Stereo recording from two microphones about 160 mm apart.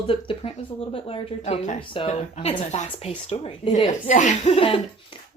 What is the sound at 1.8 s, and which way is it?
Speech, 35° left (ahead or behind).